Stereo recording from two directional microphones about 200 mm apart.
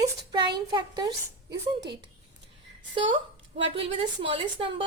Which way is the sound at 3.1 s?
25° right (ahead or behind).